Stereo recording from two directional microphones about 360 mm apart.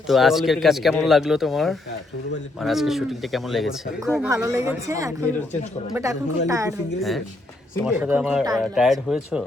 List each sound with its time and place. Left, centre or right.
0.1 s a woman's voice: centre